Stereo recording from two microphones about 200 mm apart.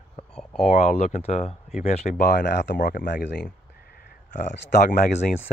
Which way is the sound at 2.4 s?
60° left (ahead or behind).